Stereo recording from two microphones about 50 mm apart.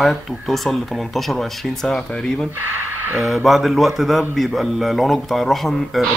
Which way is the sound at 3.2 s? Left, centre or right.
Centre.